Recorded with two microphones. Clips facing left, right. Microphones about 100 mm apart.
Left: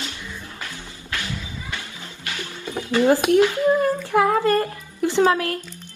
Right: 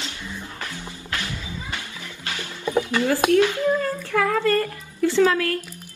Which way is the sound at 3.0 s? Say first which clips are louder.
Left 4 dB; 20° left (ahead or behind).